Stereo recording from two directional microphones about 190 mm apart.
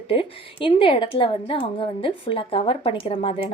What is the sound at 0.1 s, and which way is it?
A woman's voice, 25° left (ahead or behind).